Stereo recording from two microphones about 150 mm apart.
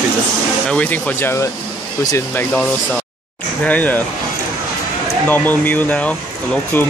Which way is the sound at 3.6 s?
10° left (ahead or behind).